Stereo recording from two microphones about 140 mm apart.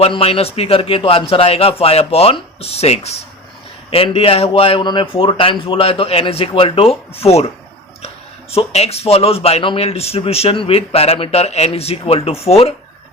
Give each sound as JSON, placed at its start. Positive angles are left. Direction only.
{"t": 0.0, "sound": "a man's voice", "side_deg": 45}